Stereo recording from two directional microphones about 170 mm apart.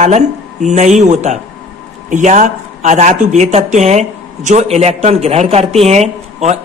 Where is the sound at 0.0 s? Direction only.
45° right (ahead or behind).